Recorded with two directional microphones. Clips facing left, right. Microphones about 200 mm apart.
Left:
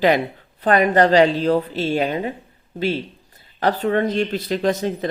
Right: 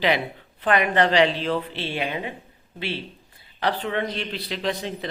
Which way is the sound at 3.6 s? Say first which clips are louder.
Left 6 dB; 45° left (ahead or behind).